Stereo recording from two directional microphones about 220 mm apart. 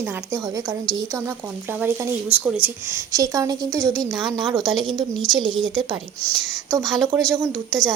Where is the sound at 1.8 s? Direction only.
10° right (ahead or behind).